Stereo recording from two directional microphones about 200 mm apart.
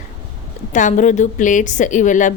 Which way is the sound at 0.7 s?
40° left (ahead or behind).